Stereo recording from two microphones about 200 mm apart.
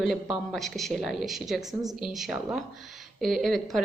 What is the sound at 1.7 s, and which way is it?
Speech, 20° right (ahead or behind).